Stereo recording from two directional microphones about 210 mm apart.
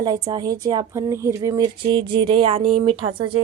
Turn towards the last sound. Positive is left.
turn(degrees=-25)  # may be behind; listen again after turning